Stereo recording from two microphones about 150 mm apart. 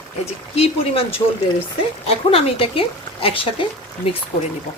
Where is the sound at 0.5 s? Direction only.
40° left (ahead or behind).